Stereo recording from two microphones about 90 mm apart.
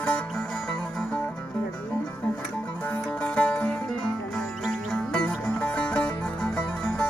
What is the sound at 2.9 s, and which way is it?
Music, 15° left (ahead or behind).